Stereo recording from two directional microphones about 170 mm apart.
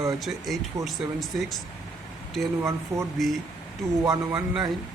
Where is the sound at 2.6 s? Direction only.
15° right (ahead or behind).